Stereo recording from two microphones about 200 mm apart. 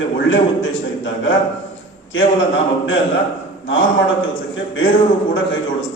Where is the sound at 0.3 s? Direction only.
70° left (ahead or behind).